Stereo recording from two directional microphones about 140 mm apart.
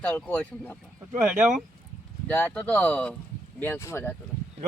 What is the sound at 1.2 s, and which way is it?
Speech, 5° right (ahead or behind).